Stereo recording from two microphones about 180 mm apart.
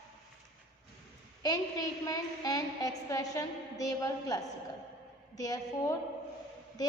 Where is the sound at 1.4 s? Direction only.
20° left (ahead or behind).